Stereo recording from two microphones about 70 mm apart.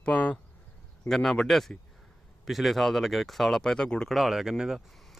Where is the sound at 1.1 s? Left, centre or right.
Centre.